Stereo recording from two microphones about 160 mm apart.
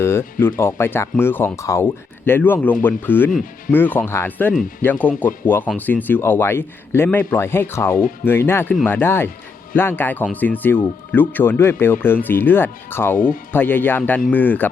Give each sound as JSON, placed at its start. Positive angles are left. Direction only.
{"t": 0.0, "sound": "speech", "side_deg": 15}
{"t": 13.1, "sound": "speech", "side_deg": 60}
{"t": 13.5, "sound": "speech", "side_deg": 10}